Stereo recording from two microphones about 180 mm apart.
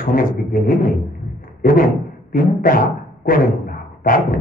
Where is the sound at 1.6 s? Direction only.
50° left (ahead or behind).